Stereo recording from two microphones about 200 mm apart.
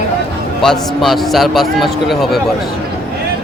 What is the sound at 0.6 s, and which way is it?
A man's voice, centre (ahead or behind).